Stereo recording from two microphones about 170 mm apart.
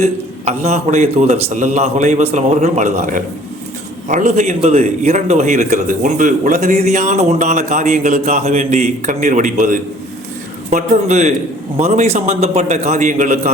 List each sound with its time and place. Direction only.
0.0 s a man's voice: 40° right (ahead or behind)